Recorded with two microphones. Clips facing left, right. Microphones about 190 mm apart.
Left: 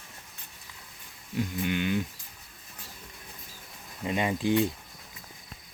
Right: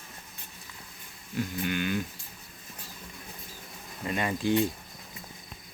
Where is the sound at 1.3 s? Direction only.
20° left (ahead or behind).